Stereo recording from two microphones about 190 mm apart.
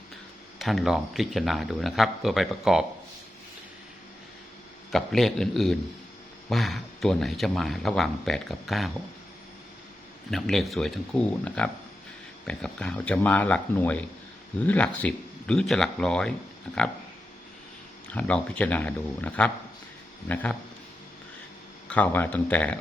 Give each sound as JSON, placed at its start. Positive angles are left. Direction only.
{"t": 0.6, "sound": "speech", "side_deg": 0}
{"t": 4.9, "sound": "speech", "side_deg": 0}
{"t": 10.3, "sound": "speech", "side_deg": 0}
{"t": 18.1, "sound": "speech", "side_deg": 5}
{"t": 21.8, "sound": "speech", "side_deg": 10}